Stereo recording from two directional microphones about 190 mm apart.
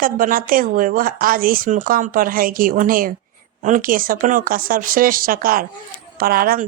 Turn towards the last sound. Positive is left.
turn(degrees=-50)  # may be behind; listen again after turning